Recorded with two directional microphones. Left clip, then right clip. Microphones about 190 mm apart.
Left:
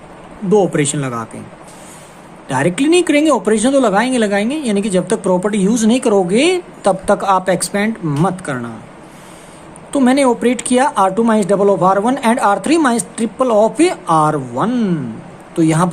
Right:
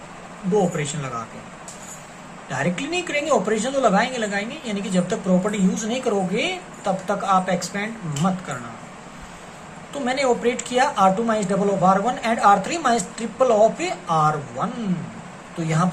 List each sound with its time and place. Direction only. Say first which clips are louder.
0.5 s speech: left 8 dB; 65° left (ahead or behind)
2.5 s speech: left 11 dB; 65° left (ahead or behind)
10.0 s speech: left 8 dB; 65° left (ahead or behind)